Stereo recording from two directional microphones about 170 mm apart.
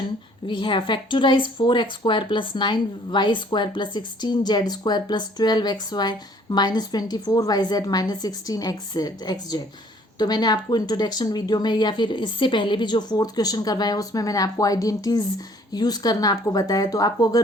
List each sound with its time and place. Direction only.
0.4 s speech: 30° left (ahead or behind)